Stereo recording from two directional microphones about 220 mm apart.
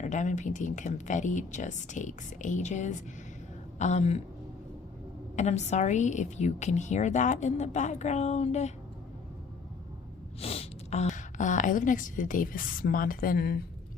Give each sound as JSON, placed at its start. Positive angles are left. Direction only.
{"t": 0.0, "sound": "a woman's voice", "side_deg": 35}
{"t": 5.4, "sound": "a woman's voice", "side_deg": 30}
{"t": 10.4, "sound": "a woman's voice", "side_deg": 25}